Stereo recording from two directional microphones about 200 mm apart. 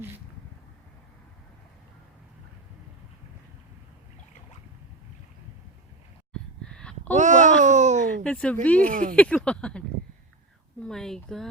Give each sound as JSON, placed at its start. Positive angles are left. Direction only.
{"t": 6.7, "sound": "a sound", "side_deg": 5}
{"t": 7.1, "sound": "a sound", "side_deg": -35}
{"t": 8.2, "sound": "speech", "side_deg": 5}
{"t": 8.9, "sound": "speech", "side_deg": -40}
{"t": 9.1, "sound": "speech", "side_deg": 5}
{"t": 10.8, "sound": "speech", "side_deg": 5}